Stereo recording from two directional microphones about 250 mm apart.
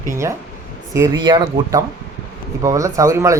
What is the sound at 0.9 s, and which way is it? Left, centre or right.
A man's voice, centre.